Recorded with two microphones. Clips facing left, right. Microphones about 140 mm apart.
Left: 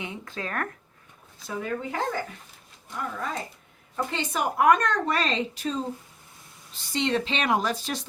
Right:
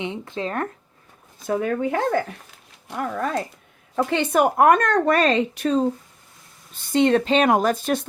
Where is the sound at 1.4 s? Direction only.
55° right (ahead or behind).